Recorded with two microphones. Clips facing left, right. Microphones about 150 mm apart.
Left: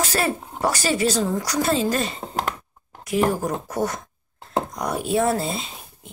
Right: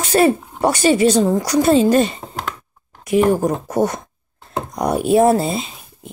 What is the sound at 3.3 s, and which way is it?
Speech, 25° right (ahead or behind).